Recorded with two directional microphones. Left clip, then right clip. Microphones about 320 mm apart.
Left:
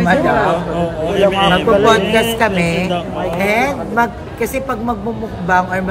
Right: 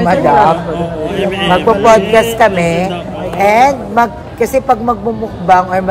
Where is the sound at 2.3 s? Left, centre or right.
Centre.